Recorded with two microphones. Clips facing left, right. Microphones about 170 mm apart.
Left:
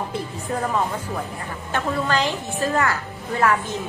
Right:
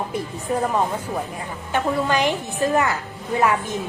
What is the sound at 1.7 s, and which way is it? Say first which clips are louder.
A woman's voice: right 2 dB; 15° right (ahead or behind).